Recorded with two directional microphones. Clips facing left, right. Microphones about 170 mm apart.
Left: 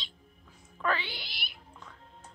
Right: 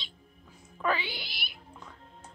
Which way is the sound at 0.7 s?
10° right (ahead or behind).